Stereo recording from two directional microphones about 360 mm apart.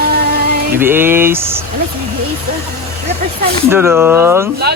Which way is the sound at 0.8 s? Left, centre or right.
Centre.